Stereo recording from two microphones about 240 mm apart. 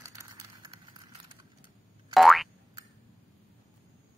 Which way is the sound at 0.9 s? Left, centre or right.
Centre.